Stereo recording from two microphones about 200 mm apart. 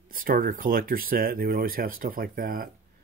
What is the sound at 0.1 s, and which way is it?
Speech, 45° right (ahead or behind).